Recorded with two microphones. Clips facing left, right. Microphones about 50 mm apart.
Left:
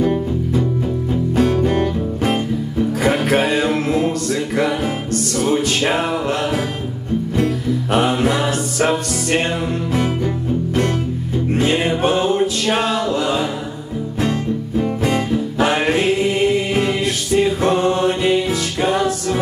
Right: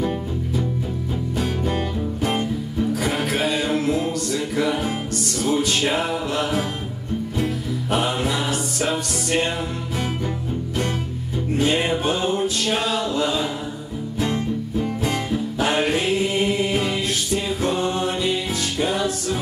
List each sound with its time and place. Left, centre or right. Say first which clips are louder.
1.3 s music: left 8 dB; left
7.3 s music: left 7 dB; left
11.5 s music: left 2 dB; left
15.6 s choir: left 4 dB; left